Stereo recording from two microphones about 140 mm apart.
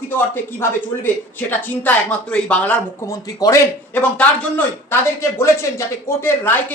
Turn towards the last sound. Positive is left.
turn(degrees=15)  # may be behind; listen again after turning